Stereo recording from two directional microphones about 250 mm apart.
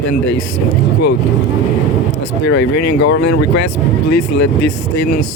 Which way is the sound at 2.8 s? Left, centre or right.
Left.